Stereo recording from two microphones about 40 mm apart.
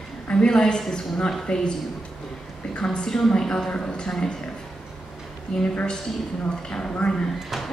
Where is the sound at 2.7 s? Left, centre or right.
Left.